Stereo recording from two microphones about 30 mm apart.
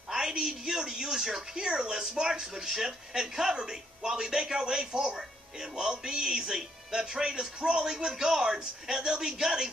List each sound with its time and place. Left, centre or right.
0.1 s a man's voice: right